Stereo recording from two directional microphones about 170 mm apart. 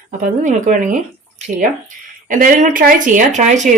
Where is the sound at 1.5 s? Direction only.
45° right (ahead or behind).